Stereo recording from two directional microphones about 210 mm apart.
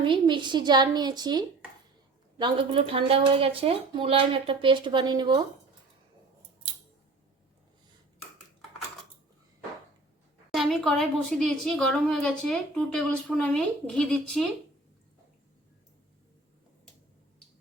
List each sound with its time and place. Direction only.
0.0 s speech: 20° right (ahead or behind)
10.5 s a woman's voice: centre (ahead or behind)